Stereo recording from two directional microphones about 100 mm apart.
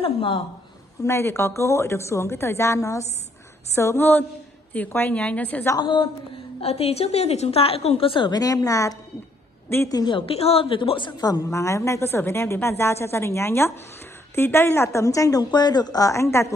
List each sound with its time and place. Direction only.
0.0 s speech: 60° left (ahead or behind)
1.0 s a woman's voice: 25° left (ahead or behind)
5.8 s a woman's voice: 55° left (ahead or behind)
6.6 s a woman's voice: 90° left; by 8.3 s 65° left (ahead or behind)
8.3 s speech: 40° left (ahead or behind)
10.1 s a woman's voice: 80° left; by 16.5 s 25° left (ahead or behind)